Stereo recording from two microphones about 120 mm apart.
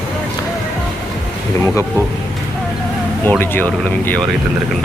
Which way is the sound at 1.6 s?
20° left (ahead or behind).